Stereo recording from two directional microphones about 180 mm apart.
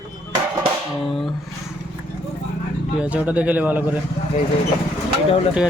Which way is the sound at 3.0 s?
5° right (ahead or behind).